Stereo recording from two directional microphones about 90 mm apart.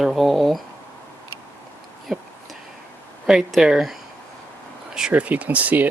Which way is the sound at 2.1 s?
5° right (ahead or behind).